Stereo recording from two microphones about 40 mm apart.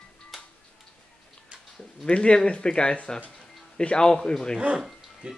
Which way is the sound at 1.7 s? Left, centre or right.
Left.